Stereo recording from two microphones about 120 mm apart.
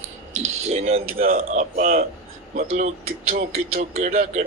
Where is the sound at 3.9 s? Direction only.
70° right (ahead or behind).